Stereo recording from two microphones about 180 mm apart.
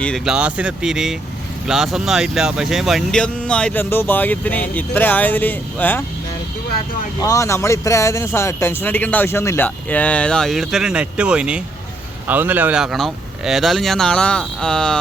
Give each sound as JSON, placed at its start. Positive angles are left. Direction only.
{"t": 0.0, "sound": "speech", "side_deg": 0}
{"t": 7.2, "sound": "speech", "side_deg": 20}